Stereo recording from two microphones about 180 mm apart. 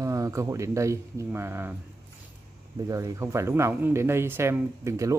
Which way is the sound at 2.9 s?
20° right (ahead or behind).